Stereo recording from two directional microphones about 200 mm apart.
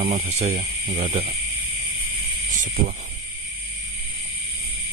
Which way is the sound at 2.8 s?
40° right (ahead or behind).